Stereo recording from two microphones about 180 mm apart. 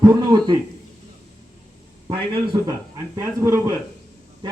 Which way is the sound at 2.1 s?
25° right (ahead or behind).